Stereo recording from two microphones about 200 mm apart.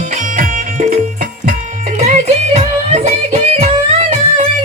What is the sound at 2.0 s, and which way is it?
Music, 35° right (ahead or behind).